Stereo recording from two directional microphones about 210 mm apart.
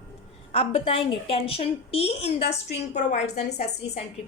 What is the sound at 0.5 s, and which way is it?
A woman's voice, 25° left (ahead or behind).